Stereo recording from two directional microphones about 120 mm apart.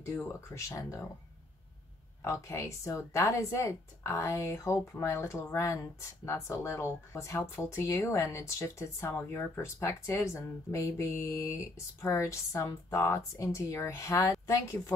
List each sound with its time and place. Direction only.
0.0 s speech: 25° left (ahead or behind)
2.2 s speech: 25° left (ahead or behind)